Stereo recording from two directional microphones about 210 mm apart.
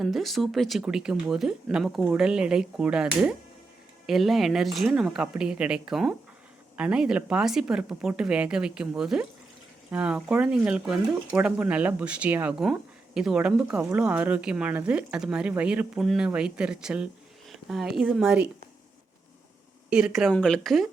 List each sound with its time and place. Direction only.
0.0 s speech: centre (ahead or behind)
19.9 s speech: 5° right (ahead or behind)